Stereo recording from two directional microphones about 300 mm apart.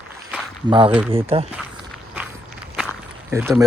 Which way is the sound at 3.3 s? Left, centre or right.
Centre.